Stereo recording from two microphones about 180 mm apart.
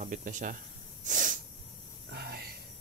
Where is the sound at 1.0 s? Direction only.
45° right (ahead or behind).